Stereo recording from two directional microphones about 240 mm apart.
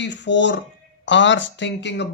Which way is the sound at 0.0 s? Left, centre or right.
Left.